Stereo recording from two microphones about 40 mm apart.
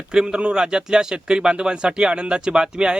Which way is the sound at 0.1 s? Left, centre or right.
Right.